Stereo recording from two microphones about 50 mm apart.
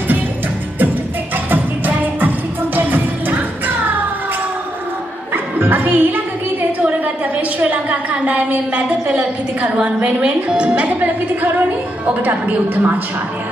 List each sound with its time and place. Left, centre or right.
1.5 s music: right
5.3 s bow-wow: right
6.8 s a sound: right
10.0 s speech: right
10.9 s a woman's voice: right